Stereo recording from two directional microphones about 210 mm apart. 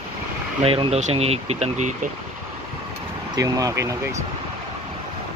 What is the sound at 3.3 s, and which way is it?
Speech, 15° right (ahead or behind).